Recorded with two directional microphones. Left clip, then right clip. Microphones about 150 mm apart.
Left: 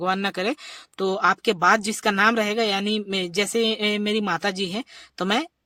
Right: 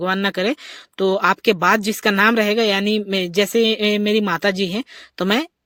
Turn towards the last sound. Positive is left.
turn(degrees=-25)  # may be behind; listen again after turning